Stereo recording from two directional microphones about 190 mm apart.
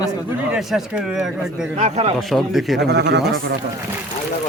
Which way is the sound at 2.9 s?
65° right (ahead or behind).